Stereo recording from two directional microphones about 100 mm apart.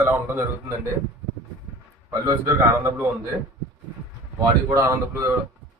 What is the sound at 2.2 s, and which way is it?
Speech, 25° right (ahead or behind).